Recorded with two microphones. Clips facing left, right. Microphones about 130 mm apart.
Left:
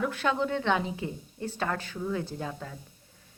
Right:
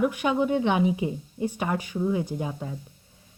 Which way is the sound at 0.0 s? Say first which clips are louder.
Right 5 dB; 15° right (ahead or behind).